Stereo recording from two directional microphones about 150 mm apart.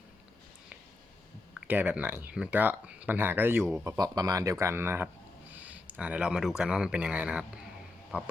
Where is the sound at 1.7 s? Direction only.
10° right (ahead or behind).